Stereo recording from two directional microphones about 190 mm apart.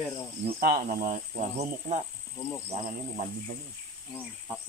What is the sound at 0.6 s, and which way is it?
Speech, 45° right (ahead or behind).